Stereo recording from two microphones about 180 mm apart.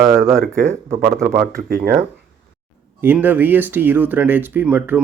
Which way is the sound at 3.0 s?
10° right (ahead or behind).